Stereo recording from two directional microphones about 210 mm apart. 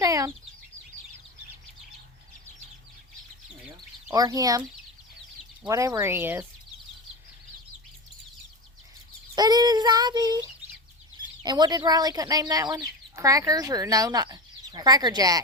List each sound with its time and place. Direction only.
0.0 s chicken: 15° right (ahead or behind)
4.1 s speech: 15° right (ahead or behind)
5.6 s speech: 15° right (ahead or behind)
9.3 s child singing: 20° right (ahead or behind)
11.4 s speech: 20° right (ahead or behind)